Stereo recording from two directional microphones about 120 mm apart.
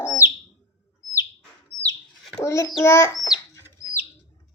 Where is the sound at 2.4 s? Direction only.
25° left (ahead or behind).